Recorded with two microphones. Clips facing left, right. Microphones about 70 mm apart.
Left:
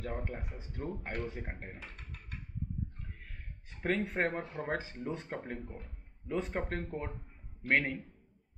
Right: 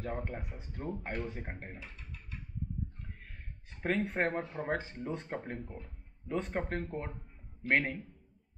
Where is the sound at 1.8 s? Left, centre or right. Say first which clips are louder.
Even; left.